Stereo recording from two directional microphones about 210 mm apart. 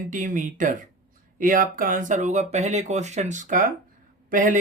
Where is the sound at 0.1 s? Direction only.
40° right (ahead or behind).